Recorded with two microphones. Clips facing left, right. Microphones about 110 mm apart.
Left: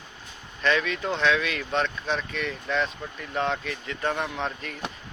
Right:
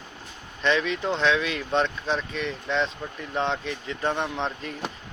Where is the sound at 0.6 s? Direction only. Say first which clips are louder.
Right 1 dB; 25° right (ahead or behind).